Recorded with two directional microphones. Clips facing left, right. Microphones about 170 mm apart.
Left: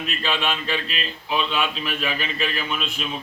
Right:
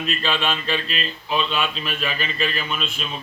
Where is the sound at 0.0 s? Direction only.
10° left (ahead or behind).